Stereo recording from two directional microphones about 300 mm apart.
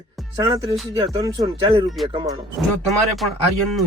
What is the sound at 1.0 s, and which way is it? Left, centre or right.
Speech, centre.